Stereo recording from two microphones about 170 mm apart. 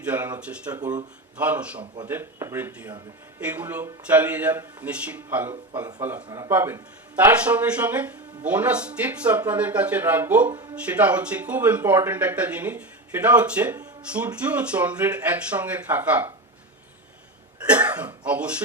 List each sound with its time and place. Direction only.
0.0 s speech: 10° right (ahead or behind)
6.2 s speech: 20° right (ahead or behind)
17.7 s speech: 10° right (ahead or behind)